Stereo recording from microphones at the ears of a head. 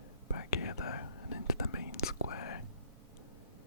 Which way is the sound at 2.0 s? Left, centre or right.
Left.